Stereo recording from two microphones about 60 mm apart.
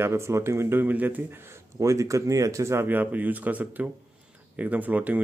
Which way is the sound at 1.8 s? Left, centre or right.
Right.